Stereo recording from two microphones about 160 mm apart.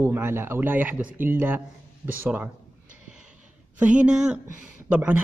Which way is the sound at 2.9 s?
5° right (ahead or behind).